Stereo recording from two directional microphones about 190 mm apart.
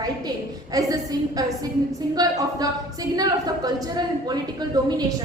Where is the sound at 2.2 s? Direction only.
20° right (ahead or behind).